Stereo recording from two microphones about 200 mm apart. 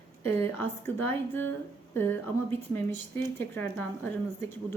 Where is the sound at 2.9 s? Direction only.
10° left (ahead or behind).